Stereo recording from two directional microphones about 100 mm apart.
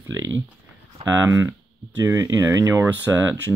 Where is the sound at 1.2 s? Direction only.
35° right (ahead or behind).